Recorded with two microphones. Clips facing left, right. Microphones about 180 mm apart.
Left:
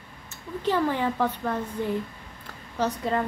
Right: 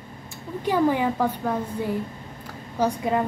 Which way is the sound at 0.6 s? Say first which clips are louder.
Right 3 dB; 10° right (ahead or behind).